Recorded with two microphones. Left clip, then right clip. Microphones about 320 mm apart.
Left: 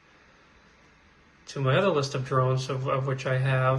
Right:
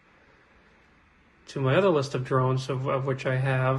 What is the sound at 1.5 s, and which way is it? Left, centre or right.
Speech, centre.